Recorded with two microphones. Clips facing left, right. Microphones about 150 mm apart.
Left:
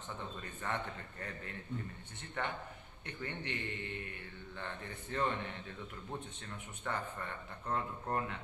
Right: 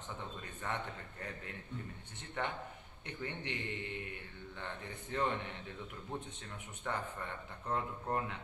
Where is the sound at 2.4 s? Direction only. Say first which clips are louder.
Even; 20° right (ahead or behind).